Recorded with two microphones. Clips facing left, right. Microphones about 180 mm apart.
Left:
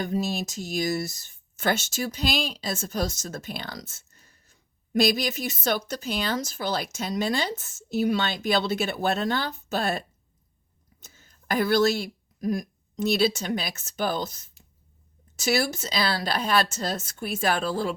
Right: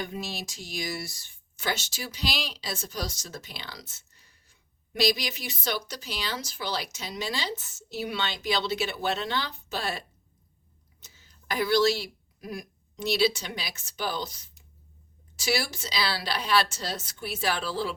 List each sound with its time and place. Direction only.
0.0 s speech: 45° left (ahead or behind)
11.0 s speech: 50° left (ahead or behind)